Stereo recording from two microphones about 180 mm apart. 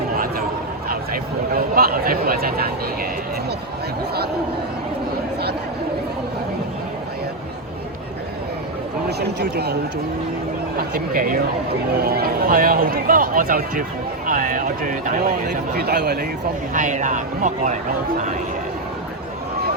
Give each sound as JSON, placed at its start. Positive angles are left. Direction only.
{"t": 0.9, "sound": "speech", "side_deg": -55}
{"t": 9.0, "sound": "speech", "side_deg": -65}
{"t": 10.8, "sound": "speech", "side_deg": -50}
{"t": 16.7, "sound": "speech", "side_deg": -45}